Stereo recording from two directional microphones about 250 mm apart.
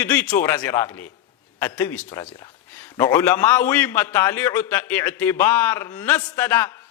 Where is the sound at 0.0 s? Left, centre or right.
Centre.